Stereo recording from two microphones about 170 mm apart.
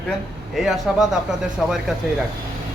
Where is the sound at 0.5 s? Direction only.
Centre (ahead or behind).